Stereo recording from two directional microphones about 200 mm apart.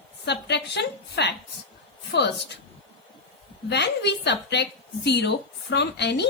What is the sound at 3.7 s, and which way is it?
A woman's voice, 60° left (ahead or behind).